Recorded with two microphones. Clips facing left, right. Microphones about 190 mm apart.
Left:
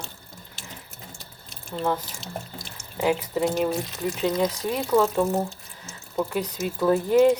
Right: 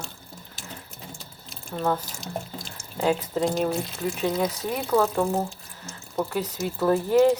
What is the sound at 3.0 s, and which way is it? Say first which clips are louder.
Speech: even; 10° left (ahead or behind).